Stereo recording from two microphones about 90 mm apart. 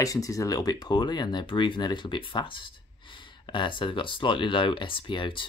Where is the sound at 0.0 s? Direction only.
40° left (ahead or behind).